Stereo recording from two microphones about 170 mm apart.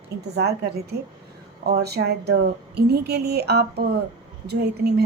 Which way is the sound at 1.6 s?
70° right (ahead or behind).